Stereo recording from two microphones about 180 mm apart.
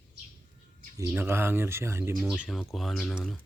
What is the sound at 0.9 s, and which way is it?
Speech, 15° right (ahead or behind).